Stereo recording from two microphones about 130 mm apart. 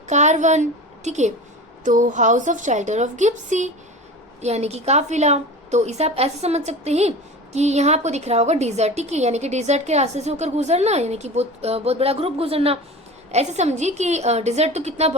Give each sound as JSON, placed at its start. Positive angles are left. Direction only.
{"t": 0.1, "sound": "a woman's voice", "side_deg": -65}
{"t": 1.8, "sound": "a woman's voice", "side_deg": -75}
{"t": 4.4, "sound": "a woman's voice", "side_deg": -55}
{"t": 13.3, "sound": "a woman's voice", "side_deg": -60}